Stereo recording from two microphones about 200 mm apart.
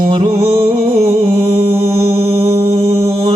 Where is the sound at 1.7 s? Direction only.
90° right.